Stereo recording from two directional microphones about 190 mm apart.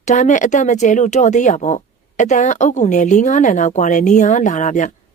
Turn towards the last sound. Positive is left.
turn(degrees=40)  # may be behind; listen again after turning